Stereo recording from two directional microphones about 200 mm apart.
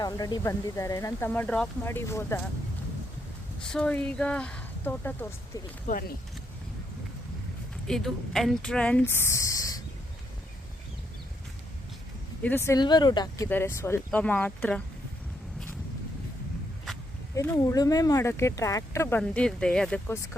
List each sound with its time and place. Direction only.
0.0 s speech: 20° left (ahead or behind)
3.6 s speech: 5° left (ahead or behind)
5.9 s speech: 50° left (ahead or behind)
7.9 s speech: centre (ahead or behind); by 9.8 s 15° left (ahead or behind)
12.4 s speech: 10° left (ahead or behind)
17.3 s speech: 15° left (ahead or behind)